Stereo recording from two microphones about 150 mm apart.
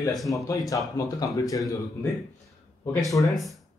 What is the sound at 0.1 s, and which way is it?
Speech, centre (ahead or behind).